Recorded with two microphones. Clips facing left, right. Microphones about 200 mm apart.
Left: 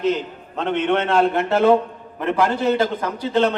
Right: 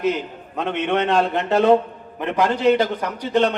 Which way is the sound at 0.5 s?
15° right (ahead or behind).